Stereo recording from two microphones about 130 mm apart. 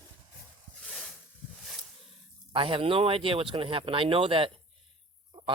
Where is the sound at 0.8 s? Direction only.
5° left (ahead or behind).